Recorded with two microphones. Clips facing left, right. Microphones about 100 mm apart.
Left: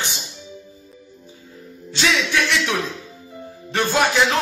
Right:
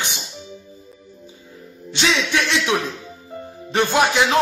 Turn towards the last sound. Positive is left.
turn(degrees=-15)  # may be behind; listen again after turning